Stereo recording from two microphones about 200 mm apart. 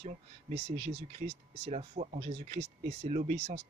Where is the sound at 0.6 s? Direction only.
60° right (ahead or behind).